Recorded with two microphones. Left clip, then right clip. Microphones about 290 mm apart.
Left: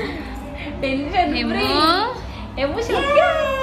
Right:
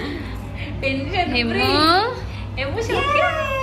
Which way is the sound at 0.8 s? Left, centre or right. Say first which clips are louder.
Left 2 dB; left.